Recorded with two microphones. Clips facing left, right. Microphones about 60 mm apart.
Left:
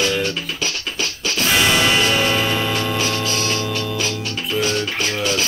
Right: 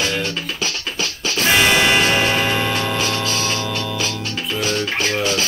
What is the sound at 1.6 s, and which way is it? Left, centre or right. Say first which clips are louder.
Church bell: right 1 dB; right.